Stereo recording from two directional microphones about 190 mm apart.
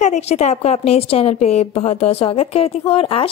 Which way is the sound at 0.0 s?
35° left (ahead or behind).